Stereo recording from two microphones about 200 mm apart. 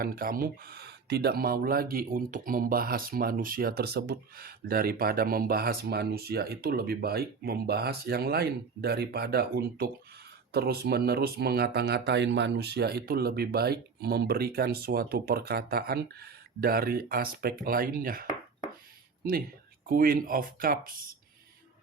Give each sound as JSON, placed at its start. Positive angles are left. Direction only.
{"t": 0.0, "sound": "speech", "side_deg": -45}
{"t": 19.9, "sound": "speech", "side_deg": -45}